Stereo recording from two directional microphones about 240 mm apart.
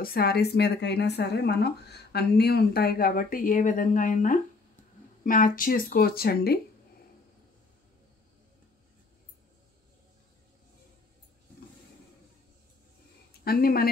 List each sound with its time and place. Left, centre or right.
0.0 s speech: left
13.4 s speech: left